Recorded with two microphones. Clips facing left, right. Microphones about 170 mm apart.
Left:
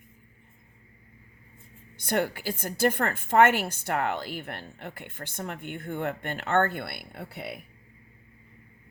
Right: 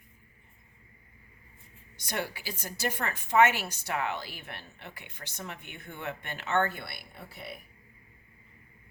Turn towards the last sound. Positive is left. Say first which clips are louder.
# left 6 dB
turn(degrees=65)  # may be behind; listen again after turning